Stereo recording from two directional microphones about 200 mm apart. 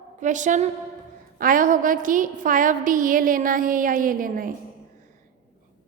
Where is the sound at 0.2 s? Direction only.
40° right (ahead or behind).